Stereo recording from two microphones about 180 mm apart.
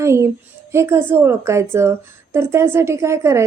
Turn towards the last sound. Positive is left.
turn(degrees=-15)  # may be behind; listen again after turning